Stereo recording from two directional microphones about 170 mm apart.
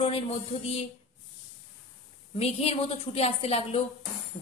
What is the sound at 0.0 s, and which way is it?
Speech, 35° left (ahead or behind).